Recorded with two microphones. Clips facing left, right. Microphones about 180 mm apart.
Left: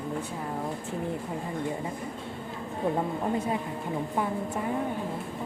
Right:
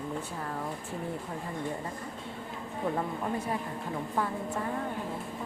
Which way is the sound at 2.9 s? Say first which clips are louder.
Left 4 dB; 20° left (ahead or behind).